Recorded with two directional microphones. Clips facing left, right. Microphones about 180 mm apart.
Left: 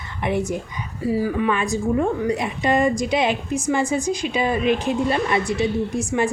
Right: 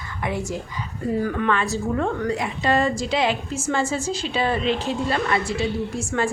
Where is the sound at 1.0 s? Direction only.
5° left (ahead or behind).